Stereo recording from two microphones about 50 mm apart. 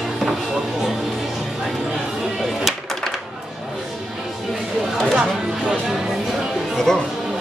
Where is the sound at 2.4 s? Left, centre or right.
Centre.